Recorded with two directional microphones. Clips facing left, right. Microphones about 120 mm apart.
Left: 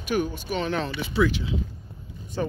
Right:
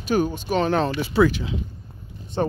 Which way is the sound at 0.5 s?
45° right (ahead or behind).